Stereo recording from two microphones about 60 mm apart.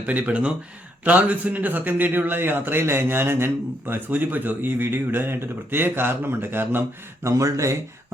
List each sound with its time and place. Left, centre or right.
0.0 s a man's voice: right
7.3 s speech: right